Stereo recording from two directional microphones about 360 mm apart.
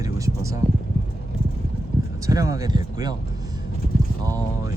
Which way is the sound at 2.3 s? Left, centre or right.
Centre.